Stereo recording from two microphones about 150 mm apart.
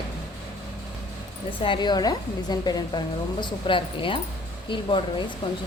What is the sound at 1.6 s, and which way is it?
Speech, 30° left (ahead or behind).